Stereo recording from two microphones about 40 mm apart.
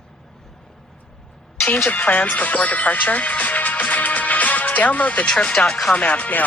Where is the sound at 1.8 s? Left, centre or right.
Left.